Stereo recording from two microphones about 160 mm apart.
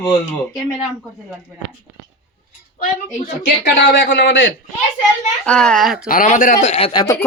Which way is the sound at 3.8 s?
90° left.